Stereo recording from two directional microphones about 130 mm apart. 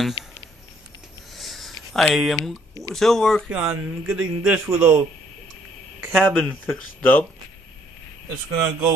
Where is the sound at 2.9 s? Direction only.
5° left (ahead or behind).